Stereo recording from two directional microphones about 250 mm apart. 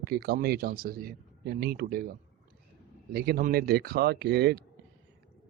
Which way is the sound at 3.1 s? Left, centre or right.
Right.